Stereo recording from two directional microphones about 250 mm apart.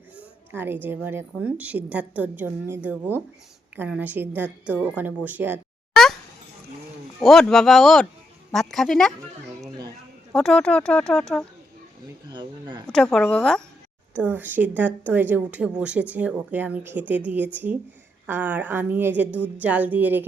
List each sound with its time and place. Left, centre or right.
0.5 s speech: centre
7.2 s speech: centre
10.3 s speech: centre
12.3 s speech: centre
12.9 s speech: centre